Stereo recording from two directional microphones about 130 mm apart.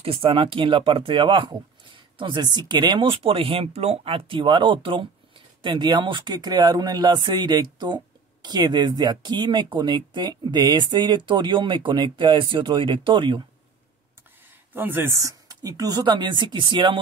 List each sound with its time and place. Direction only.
0.0 s speech: 45° right (ahead or behind)
14.7 s speech: 15° right (ahead or behind); by 17.0 s 35° right (ahead or behind)